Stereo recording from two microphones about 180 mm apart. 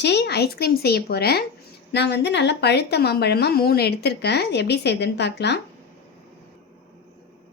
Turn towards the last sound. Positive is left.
turn(degrees=70)  # may be behind; listen again after turning